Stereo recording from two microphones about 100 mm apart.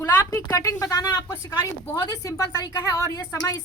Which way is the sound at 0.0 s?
35° left (ahead or behind).